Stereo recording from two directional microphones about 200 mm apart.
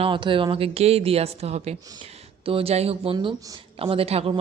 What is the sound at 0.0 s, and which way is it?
Speech, 25° right (ahead or behind).